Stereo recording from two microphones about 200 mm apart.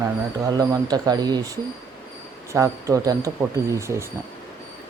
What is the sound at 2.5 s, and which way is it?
Speech, 15° right (ahead or behind).